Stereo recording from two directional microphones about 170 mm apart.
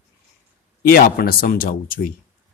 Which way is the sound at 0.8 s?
60° left (ahead or behind).